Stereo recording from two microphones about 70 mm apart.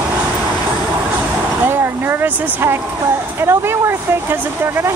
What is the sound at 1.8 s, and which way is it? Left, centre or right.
Speech, right.